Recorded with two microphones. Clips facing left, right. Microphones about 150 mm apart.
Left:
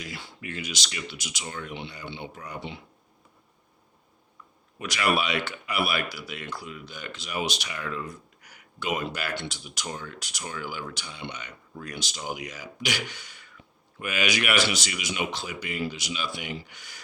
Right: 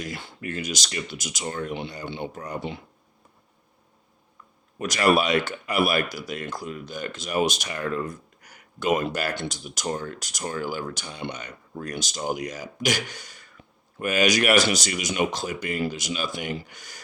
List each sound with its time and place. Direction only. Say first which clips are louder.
0.0 s speech: right 5 dB; 45° right (ahead or behind)
4.8 s speech: right 5 dB; 40° right (ahead or behind)